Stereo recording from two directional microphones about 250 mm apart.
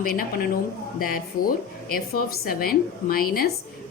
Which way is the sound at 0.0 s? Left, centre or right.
Left.